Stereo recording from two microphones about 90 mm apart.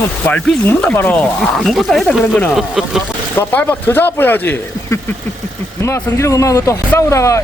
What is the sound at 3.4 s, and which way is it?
Speech, 25° left (ahead or behind).